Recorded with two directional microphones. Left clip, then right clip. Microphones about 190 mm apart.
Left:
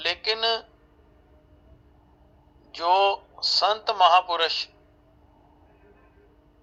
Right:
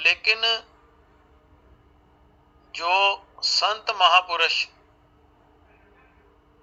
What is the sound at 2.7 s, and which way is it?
A man's voice, 25° left (ahead or behind).